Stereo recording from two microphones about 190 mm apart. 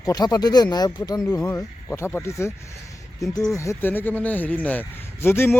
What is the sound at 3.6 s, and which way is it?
Speech, 15° left (ahead or behind).